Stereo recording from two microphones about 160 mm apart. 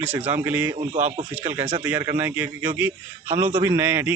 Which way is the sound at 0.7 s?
35° right (ahead or behind).